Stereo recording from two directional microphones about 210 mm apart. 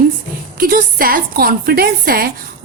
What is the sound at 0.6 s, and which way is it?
A woman's voice, 45° right (ahead or behind).